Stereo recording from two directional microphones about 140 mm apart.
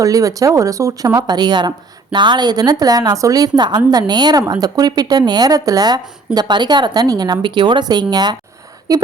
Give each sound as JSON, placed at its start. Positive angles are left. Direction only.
{"t": 0.0, "sound": "speech", "side_deg": -25}